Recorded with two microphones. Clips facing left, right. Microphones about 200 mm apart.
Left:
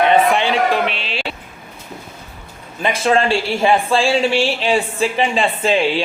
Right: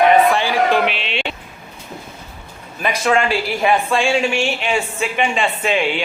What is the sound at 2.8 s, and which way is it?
A man's voice, 30° left (ahead or behind).